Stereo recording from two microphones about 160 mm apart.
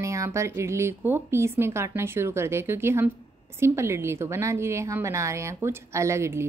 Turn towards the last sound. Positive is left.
turn(degrees=-15)  # may be behind; listen again after turning